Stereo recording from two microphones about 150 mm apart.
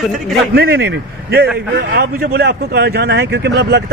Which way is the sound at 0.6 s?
90° right.